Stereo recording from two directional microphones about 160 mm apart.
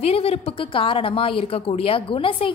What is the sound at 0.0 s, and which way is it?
Speech, 40° left (ahead or behind).